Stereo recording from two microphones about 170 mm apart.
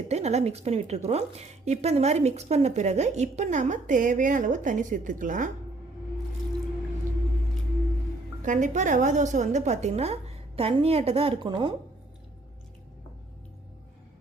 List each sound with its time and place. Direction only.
0.1 s a woman's voice: 40° right (ahead or behind)
8.4 s a woman's voice: 45° right (ahead or behind); by 11.7 s 30° right (ahead or behind)